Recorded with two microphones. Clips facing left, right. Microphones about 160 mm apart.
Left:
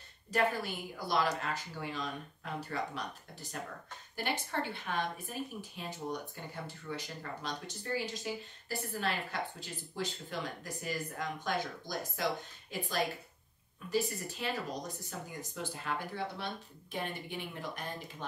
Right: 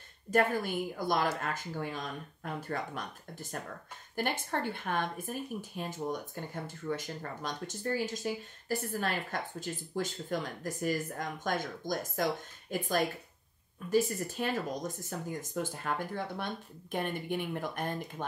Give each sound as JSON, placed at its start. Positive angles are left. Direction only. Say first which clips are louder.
{"t": 0.3, "sound": "speech", "louder": "right 4 dB", "side_deg": -50}